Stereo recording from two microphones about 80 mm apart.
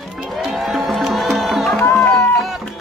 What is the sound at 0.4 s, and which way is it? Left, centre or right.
Crowd, centre.